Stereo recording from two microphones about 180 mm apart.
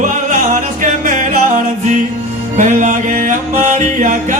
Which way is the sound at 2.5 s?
45° right (ahead or behind).